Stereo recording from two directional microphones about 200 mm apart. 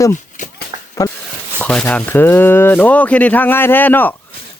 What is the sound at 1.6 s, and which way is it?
Speech, 5° left (ahead or behind).